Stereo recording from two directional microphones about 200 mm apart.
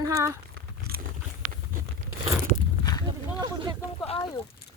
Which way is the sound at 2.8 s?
20° left (ahead or behind).